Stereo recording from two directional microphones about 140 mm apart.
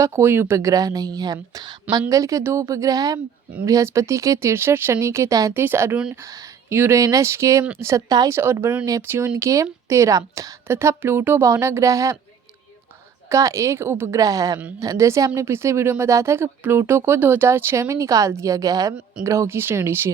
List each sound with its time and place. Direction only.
0.0 s speech: 20° right (ahead or behind)
13.2 s speech: 20° right (ahead or behind)